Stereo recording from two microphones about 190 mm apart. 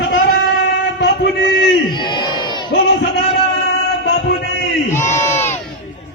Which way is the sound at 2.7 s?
65° left (ahead or behind).